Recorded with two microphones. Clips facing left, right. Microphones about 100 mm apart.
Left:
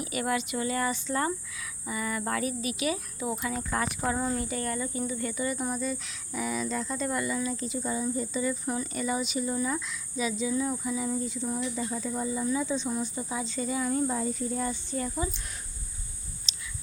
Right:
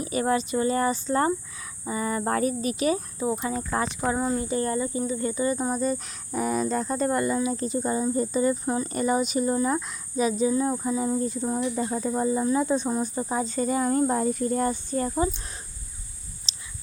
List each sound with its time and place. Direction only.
0.0 s speech: 35° right (ahead or behind)
8.6 s speech: 35° right (ahead or behind)
16.5 s whispering: 35° right (ahead or behind)